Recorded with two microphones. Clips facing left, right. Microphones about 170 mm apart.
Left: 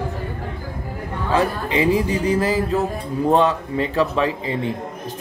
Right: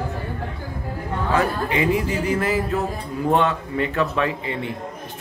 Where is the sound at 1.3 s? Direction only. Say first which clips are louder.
Left 2 dB; 30° left (ahead or behind).